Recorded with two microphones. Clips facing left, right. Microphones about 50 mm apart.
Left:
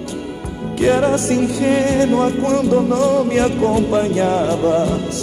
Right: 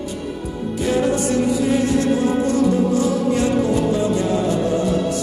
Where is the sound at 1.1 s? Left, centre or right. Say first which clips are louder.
Left 2 dB; left.